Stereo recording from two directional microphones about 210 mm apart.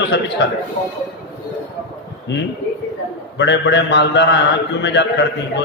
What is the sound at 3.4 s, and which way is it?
Music, 55° left (ahead or behind).